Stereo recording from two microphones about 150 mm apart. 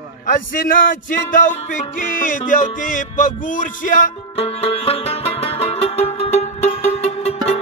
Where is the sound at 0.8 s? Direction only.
60° left (ahead or behind).